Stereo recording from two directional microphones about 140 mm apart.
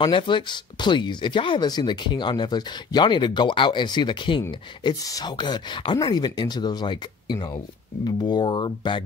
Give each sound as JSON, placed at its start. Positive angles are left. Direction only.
{"t": 0.0, "sound": "speech", "side_deg": 35}